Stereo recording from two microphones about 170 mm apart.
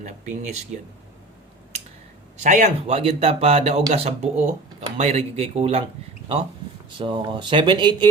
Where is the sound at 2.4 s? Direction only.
40° right (ahead or behind).